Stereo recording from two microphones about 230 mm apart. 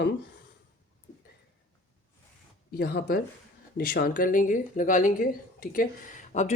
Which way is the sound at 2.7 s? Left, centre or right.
Left.